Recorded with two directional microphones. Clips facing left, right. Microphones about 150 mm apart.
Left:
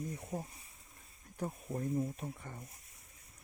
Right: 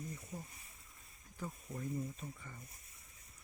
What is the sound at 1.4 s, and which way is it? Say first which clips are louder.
Speech: left 6 dB; 55° left (ahead or behind).